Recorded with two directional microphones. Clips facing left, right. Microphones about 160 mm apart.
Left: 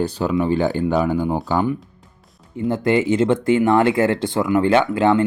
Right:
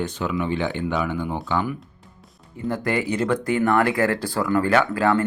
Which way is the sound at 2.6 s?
25° left (ahead or behind).